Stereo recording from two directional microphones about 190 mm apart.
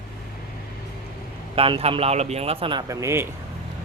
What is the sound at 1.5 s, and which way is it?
Speech, 30° right (ahead or behind).